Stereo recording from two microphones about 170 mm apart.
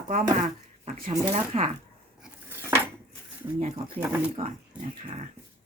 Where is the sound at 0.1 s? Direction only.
45° right (ahead or behind).